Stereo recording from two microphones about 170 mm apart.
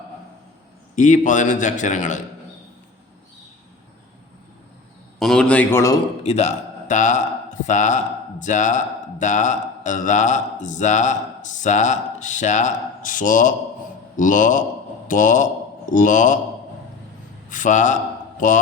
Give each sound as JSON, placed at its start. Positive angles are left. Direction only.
{"t": 0.9, "sound": "a man's voice", "side_deg": 45}
{"t": 5.2, "sound": "a man's voice", "side_deg": 5}
{"t": 6.2, "sound": "a man's voice", "side_deg": 40}
{"t": 17.5, "sound": "a man's voice", "side_deg": 45}